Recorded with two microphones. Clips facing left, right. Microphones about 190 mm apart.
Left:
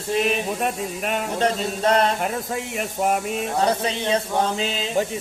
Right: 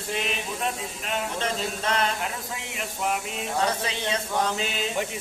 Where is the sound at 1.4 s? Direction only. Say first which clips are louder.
Left 7 dB; 35° left (ahead or behind).